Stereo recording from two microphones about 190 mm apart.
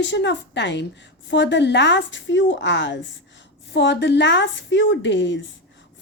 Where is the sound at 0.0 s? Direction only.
70° left (ahead or behind).